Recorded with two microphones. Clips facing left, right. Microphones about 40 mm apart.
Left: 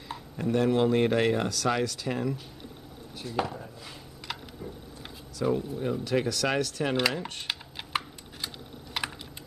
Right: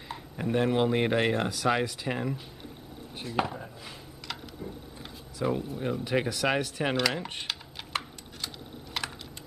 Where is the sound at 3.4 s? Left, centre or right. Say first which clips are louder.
Right 1 dB; centre.